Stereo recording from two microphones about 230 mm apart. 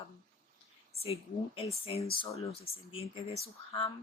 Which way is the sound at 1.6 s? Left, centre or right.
Left.